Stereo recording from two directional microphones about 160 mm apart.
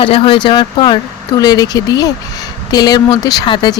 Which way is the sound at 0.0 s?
35° left (ahead or behind).